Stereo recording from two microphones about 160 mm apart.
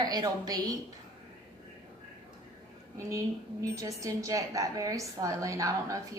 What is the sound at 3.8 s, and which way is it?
A woman's voice, 20° right (ahead or behind).